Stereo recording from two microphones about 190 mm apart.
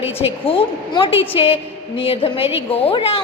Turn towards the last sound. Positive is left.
turn(degrees=30)  # may be behind; listen again after turning